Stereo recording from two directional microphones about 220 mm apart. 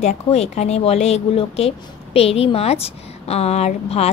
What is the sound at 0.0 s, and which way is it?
A woman's voice, 30° left (ahead or behind).